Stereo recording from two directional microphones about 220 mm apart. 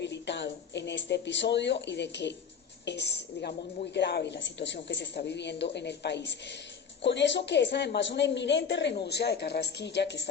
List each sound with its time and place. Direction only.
0.0 s a woman's voice: 50° left (ahead or behind)